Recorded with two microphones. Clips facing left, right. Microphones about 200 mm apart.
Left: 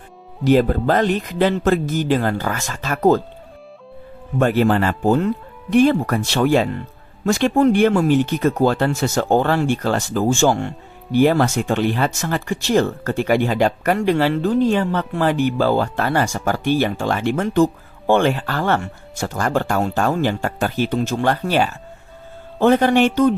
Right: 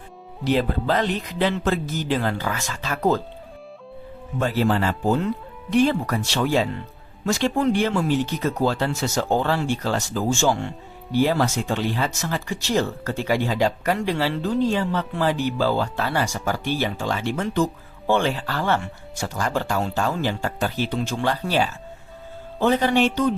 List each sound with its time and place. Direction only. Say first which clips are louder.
0.4 s speech: left 6 dB; 45° left (ahead or behind)
4.4 s speech: left 5 dB; 60° left (ahead or behind)